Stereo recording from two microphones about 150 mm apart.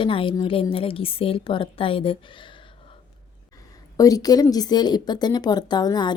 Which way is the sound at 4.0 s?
25° left (ahead or behind).